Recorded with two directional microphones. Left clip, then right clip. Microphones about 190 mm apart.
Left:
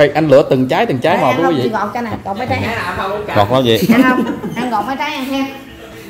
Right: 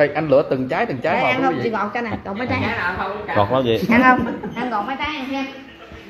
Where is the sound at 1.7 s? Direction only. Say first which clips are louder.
Left 4 dB; 35° right (ahead or behind).